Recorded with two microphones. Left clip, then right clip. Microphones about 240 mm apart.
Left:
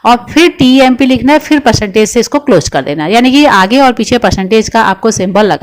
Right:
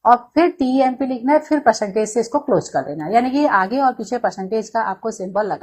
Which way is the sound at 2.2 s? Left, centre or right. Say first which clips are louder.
Left 9 dB; left.